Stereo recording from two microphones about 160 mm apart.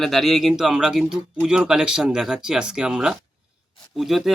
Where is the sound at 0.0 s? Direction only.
Centre (ahead or behind).